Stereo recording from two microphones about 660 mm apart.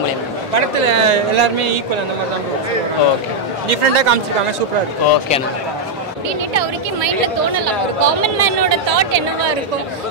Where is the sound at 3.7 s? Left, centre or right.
Right.